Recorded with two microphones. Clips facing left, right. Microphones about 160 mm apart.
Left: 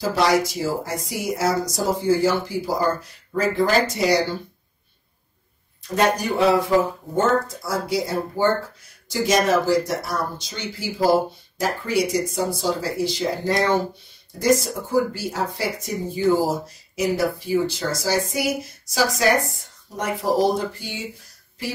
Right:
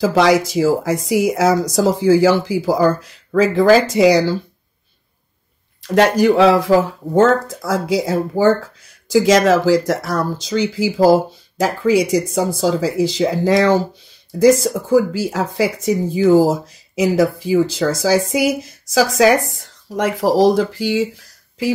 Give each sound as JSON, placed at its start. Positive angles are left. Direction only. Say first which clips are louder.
{"t": 0.0, "sound": "speech", "louder": "right 6 dB", "side_deg": -90}
{"t": 5.8, "sound": "speech", "louder": "right 7 dB", "side_deg": -90}